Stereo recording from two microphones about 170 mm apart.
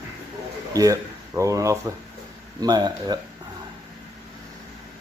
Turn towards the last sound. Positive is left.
turn(degrees=-25)  # may be behind; listen again after turning